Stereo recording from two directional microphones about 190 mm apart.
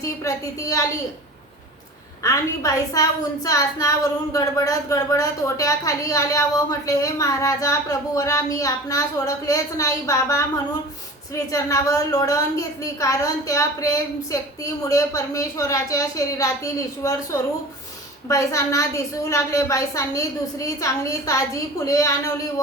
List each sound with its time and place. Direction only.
0.0 s a woman's voice: 15° left (ahead or behind)
2.2 s a woman's voice: 15° left (ahead or behind)
11.5 s a woman's voice: 15° left (ahead or behind)